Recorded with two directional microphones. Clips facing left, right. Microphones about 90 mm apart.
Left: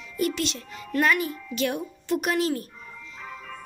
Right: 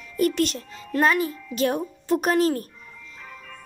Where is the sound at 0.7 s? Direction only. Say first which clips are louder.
Right 1 dB; 30° right (ahead or behind).